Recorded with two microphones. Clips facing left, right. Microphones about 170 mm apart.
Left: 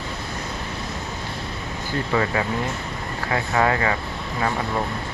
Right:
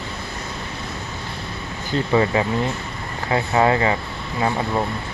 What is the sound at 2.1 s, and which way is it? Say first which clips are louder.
Speech: right 4 dB; 20° right (ahead or behind).